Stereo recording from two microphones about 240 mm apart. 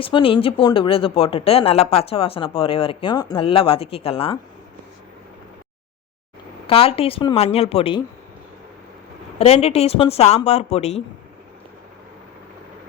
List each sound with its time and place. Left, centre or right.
0.0 s speech: left
6.7 s speech: left
9.4 s speech: left